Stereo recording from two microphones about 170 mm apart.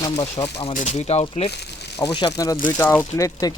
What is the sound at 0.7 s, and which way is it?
Speech, 40° left (ahead or behind).